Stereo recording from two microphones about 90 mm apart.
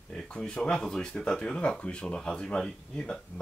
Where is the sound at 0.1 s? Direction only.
5° left (ahead or behind).